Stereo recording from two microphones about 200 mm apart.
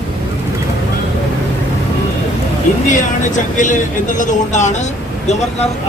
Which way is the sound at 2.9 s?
40° left (ahead or behind).